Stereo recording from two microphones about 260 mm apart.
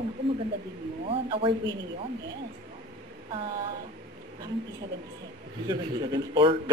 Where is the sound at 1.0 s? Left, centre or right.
Right.